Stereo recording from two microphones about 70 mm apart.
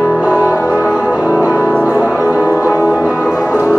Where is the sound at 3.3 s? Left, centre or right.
Left.